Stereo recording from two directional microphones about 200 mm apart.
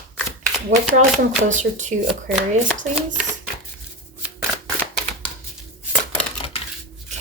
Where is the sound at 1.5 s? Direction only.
40° right (ahead or behind).